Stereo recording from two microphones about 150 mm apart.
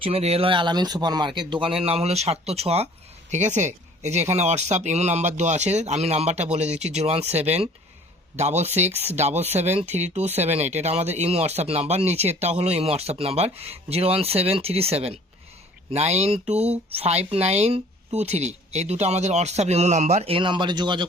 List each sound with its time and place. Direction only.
0.0 s speech: 40° right (ahead or behind)